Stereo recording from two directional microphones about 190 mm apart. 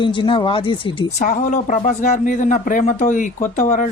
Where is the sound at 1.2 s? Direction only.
40° left (ahead or behind).